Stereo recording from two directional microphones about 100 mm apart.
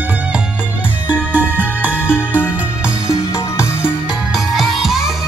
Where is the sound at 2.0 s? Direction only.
20° left (ahead or behind).